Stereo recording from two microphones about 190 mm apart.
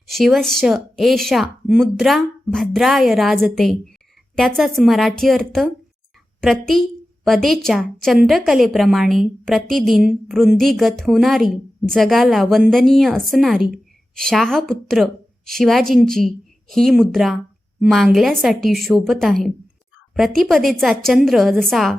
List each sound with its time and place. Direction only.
0.1 s a woman's voice: centre (ahead or behind)